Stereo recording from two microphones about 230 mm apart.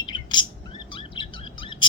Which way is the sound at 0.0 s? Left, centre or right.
Centre.